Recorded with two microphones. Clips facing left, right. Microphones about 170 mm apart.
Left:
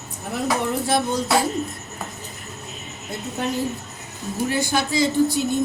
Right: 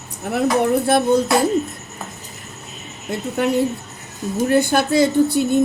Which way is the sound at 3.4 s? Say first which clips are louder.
Right 7 dB; 65° right (ahead or behind).